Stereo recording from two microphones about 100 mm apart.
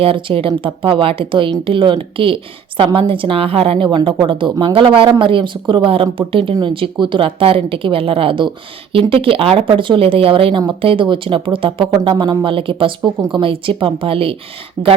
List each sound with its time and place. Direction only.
0.0 s speech: 65° right (ahead or behind)
3.9 s speech: 55° right (ahead or behind)
12.5 s speech: 60° right (ahead or behind)